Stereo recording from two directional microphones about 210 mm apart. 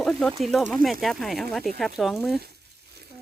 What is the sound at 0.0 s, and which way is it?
Speech, 5° left (ahead or behind).